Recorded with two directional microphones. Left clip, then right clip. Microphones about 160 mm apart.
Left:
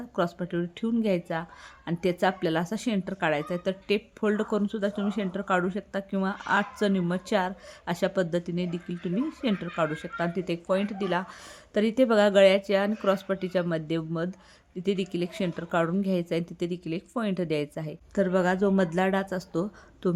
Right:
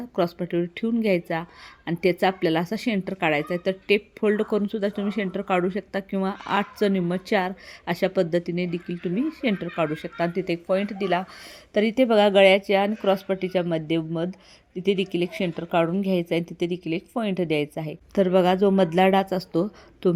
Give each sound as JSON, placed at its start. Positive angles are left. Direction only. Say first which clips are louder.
{"t": 0.2, "sound": "speech", "louder": "right 4 dB", "side_deg": -10}
{"t": 18.1, "sound": "speech", "louder": "right 5 dB", "side_deg": -20}